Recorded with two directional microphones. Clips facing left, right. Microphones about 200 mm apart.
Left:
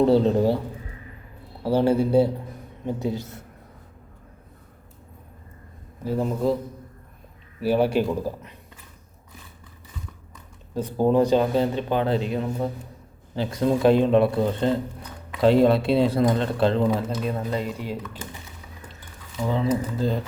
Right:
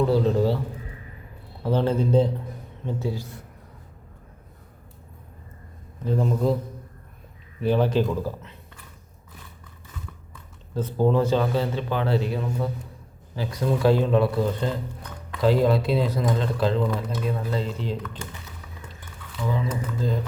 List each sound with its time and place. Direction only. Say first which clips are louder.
0.3 s a man's voice: left 2 dB; 15° left (ahead or behind)
1.6 s a man's voice: left 3 dB; 10° left (ahead or behind)
6.0 s a man's voice: even; 5° left (ahead or behind)
7.6 s a man's voice: left 1 dB; 10° left (ahead or behind)
8.1 s a sound: left 1 dB; 15° left (ahead or behind)
10.8 s a man's voice: left 2 dB; 15° left (ahead or behind)
19.5 s speech: left 4 dB; 30° left (ahead or behind)